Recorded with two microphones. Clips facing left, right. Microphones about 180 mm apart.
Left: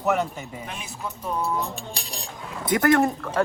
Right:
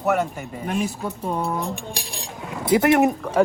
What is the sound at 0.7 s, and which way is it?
Speech, 40° right (ahead or behind).